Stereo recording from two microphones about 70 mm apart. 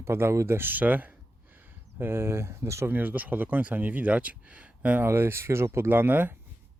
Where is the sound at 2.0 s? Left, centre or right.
Right.